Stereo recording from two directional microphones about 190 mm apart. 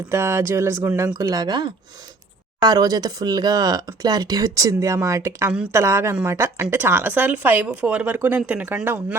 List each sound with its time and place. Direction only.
0.1 s speech: 15° right (ahead or behind)